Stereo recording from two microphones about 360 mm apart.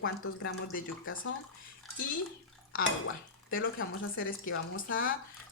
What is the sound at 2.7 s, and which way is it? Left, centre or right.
Speech, left.